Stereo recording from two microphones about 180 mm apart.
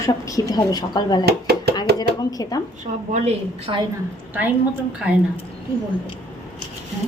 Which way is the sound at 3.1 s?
35° right (ahead or behind).